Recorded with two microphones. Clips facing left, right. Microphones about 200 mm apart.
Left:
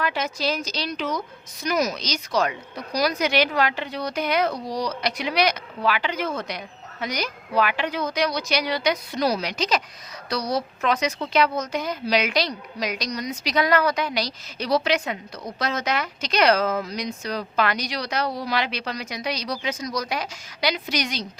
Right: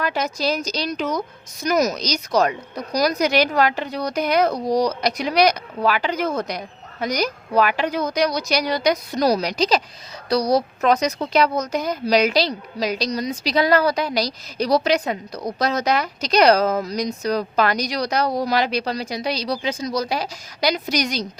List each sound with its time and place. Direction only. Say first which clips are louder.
0.0 s a woman's voice: right 3 dB; 40° right (ahead or behind)